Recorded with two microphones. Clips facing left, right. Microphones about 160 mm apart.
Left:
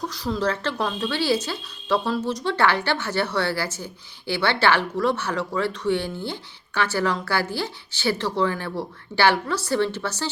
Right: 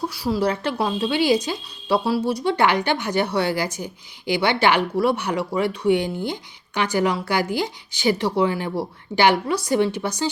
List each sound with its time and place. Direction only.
0.1 s speech: 10° right (ahead or behind)